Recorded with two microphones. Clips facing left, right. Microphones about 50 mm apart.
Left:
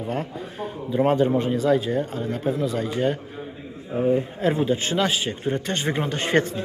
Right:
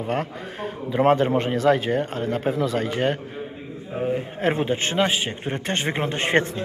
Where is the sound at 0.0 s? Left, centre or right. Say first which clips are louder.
Right 2 dB; right.